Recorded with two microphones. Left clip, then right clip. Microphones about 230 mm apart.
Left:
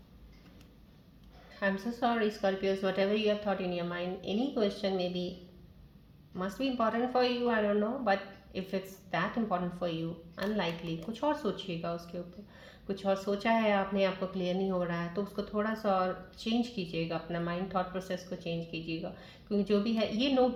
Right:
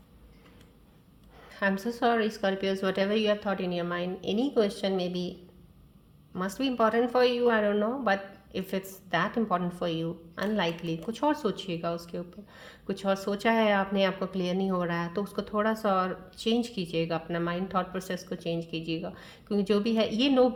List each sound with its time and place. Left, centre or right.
1.5 s speech: right
6.3 s speech: right